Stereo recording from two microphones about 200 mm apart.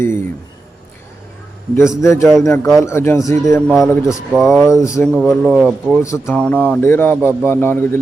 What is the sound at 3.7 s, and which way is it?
Speech, centre (ahead or behind).